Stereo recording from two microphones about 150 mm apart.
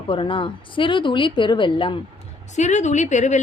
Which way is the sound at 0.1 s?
35° left (ahead or behind).